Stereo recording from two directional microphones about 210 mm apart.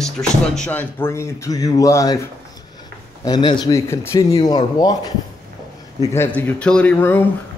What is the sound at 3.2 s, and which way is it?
Speech, 20° left (ahead or behind).